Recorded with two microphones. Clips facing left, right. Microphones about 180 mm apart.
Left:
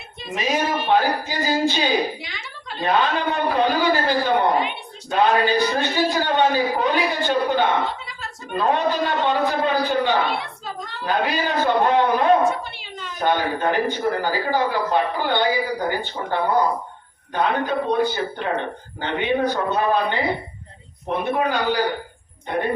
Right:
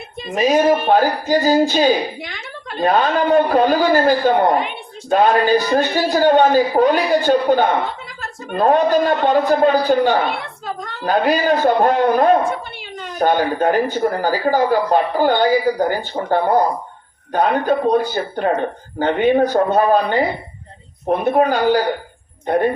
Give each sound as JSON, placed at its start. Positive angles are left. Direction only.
{"t": 0.3, "sound": "speech", "side_deg": -45}